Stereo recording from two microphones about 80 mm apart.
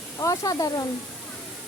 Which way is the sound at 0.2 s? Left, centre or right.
Left.